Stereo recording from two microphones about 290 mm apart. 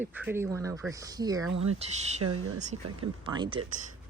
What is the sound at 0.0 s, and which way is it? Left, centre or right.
Speech, centre.